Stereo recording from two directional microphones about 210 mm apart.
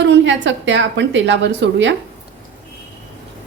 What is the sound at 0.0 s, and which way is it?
A woman's voice, 60° right (ahead or behind).